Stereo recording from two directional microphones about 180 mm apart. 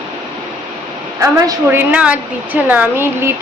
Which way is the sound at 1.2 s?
15° right (ahead or behind).